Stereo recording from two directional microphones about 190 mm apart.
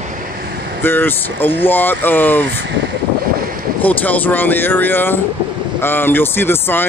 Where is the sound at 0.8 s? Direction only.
10° left (ahead or behind).